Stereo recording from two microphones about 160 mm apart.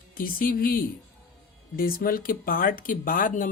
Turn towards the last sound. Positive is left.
turn(degrees=55)  # may be behind; listen again after turning